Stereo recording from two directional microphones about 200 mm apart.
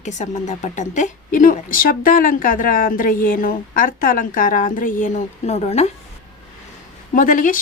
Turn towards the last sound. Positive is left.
turn(degrees=40)  # may be behind; listen again after turning